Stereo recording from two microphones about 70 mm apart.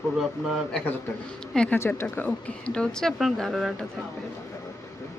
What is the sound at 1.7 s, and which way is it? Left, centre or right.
Speech, left.